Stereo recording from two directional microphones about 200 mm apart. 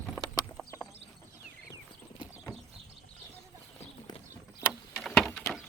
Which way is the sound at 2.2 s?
Centre (ahead or behind).